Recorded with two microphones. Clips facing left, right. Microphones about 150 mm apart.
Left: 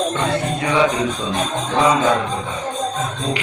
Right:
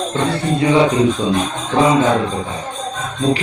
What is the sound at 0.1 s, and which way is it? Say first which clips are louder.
Music: right 2 dB; 30° right (ahead or behind).